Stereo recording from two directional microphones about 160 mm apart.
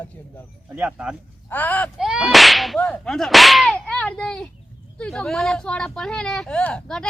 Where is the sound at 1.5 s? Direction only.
10° left (ahead or behind).